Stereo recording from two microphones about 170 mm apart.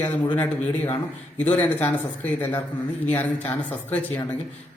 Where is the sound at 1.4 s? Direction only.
10° left (ahead or behind).